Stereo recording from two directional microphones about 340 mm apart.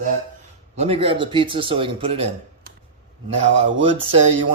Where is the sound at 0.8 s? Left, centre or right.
Centre.